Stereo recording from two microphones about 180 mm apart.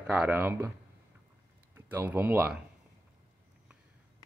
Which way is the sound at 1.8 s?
10° right (ahead or behind).